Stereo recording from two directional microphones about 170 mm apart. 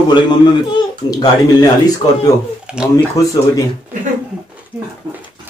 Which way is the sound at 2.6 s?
5° right (ahead or behind).